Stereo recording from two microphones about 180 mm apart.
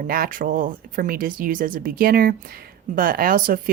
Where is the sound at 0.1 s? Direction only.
50° right (ahead or behind).